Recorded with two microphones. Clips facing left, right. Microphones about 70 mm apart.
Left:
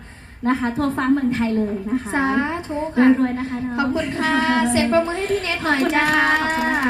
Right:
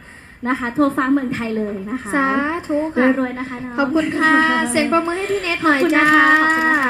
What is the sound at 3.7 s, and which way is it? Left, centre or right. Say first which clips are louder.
A woman's voice: right 6 dB; right.